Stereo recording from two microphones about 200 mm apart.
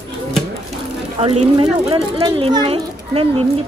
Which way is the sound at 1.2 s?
30° right (ahead or behind).